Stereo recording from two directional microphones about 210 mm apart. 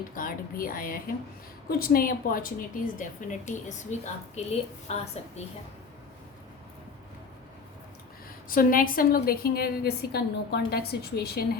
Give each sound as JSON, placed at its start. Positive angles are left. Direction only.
{"t": 0.1, "sound": "speech", "side_deg": 40}
{"t": 8.4, "sound": "a woman's voice", "side_deg": 40}